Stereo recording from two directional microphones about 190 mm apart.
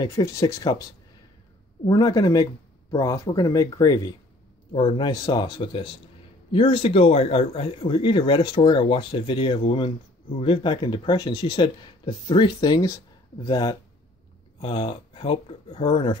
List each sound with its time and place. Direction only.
0.0 s speech: 20° left (ahead or behind)
1.9 s speech: 20° left (ahead or behind)